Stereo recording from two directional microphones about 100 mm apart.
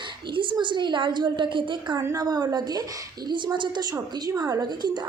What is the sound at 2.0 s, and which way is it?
A woman's voice, 35° right (ahead or behind).